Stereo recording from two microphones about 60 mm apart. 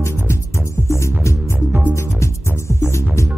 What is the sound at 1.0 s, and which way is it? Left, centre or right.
Music, left.